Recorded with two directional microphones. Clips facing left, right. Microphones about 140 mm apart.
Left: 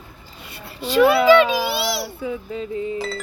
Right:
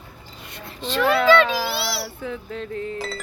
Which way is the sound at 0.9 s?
10° left (ahead or behind).